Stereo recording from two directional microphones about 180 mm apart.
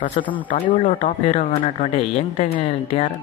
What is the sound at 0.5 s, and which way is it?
Speech, 45° left (ahead or behind).